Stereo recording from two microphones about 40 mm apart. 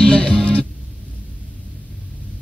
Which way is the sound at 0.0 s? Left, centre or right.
Left.